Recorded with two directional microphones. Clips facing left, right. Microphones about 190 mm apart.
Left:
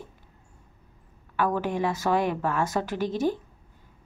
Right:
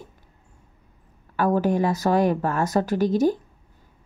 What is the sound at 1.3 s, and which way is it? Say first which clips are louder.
A woman's voice: right 5 dB; 40° right (ahead or behind).